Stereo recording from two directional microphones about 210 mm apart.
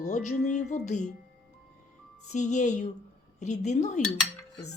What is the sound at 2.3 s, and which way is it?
Speech, 35° left (ahead or behind).